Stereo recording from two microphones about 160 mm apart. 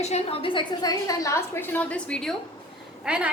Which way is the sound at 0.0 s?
40° left (ahead or behind).